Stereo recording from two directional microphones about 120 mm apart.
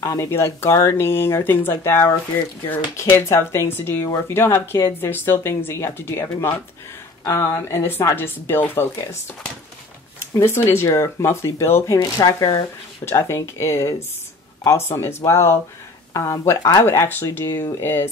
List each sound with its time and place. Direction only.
0.0 s speech: 25° left (ahead or behind)
10.3 s speech: 20° left (ahead or behind)